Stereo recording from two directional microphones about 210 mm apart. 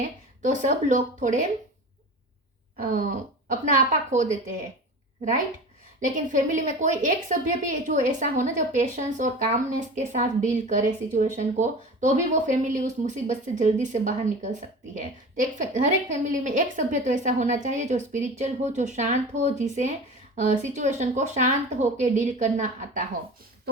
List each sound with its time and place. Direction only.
0.4 s a woman's voice: 35° right (ahead or behind)
2.7 s a woman's voice: 40° right (ahead or behind)
6.0 s a woman's voice: 35° right (ahead or behind)